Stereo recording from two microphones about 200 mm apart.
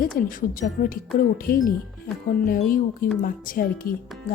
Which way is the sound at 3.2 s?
45° left (ahead or behind).